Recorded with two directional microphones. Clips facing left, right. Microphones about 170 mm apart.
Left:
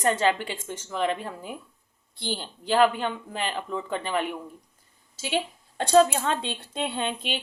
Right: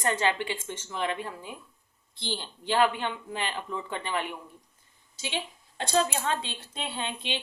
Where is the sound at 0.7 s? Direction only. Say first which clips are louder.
Left 4 dB; 40° left (ahead or behind).